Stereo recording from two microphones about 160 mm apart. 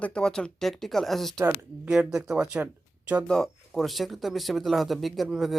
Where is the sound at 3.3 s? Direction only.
Centre (ahead or behind).